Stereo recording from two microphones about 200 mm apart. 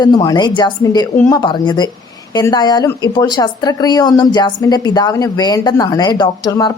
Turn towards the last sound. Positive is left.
turn(degrees=20)  # may be behind; listen again after turning